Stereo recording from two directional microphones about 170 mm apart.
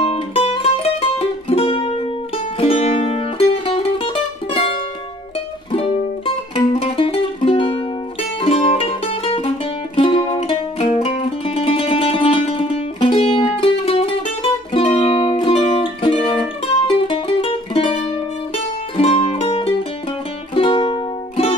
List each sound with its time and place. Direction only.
0.0 s music: 35° left (ahead or behind)